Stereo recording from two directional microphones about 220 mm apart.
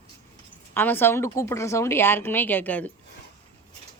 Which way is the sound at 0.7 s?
10° left (ahead or behind).